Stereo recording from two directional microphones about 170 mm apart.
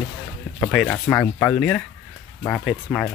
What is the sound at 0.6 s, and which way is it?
Speech, 5° left (ahead or behind).